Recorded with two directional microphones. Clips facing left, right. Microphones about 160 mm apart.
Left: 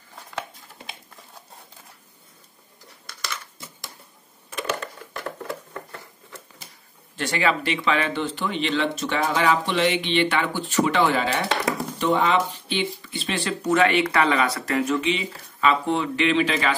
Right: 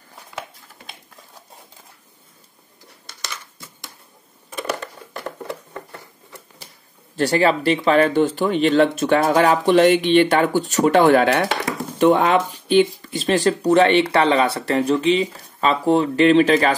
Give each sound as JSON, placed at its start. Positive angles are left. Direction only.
{"t": 7.2, "sound": "speech", "side_deg": -35}
{"t": 12.6, "sound": "speech", "side_deg": -45}